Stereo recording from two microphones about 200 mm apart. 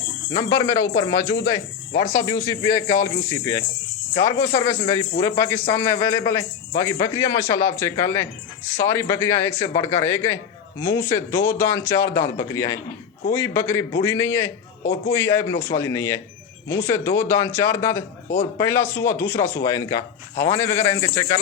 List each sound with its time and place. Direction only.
0.3 s a man's voice: 15° left (ahead or behind)